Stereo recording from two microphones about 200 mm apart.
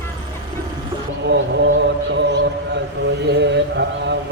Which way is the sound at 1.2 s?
60° right (ahead or behind).